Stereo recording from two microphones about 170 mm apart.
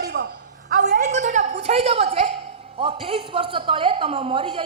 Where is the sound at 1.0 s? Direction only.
45° right (ahead or behind).